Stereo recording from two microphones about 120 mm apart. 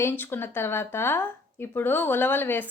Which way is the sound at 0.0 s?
20° left (ahead or behind).